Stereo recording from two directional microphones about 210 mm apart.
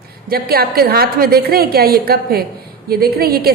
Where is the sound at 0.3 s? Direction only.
45° right (ahead or behind).